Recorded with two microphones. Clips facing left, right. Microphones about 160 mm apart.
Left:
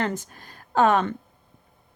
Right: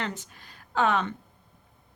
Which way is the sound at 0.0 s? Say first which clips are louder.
Left 7 dB; 45° left (ahead or behind).